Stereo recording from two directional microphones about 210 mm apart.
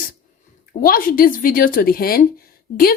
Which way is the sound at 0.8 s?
45° left (ahead or behind).